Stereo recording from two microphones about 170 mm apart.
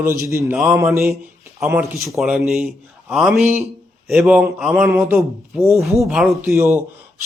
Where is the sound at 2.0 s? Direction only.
Centre (ahead or behind).